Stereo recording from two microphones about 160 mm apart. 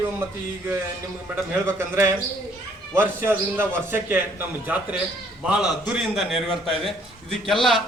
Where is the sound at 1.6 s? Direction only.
15° right (ahead or behind).